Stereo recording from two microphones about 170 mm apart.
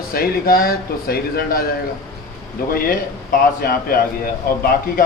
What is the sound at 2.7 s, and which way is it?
Speech, 60° left (ahead or behind).